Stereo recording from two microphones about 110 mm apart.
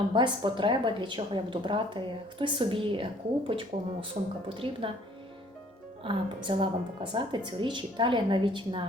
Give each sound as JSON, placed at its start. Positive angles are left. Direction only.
{"t": 0.1, "sound": "a woman's voice", "side_deg": -45}
{"t": 3.7, "sound": "speech", "side_deg": -90}
{"t": 4.1, "sound": "a woman's voice", "side_deg": -55}
{"t": 6.0, "sound": "a woman's voice", "side_deg": -50}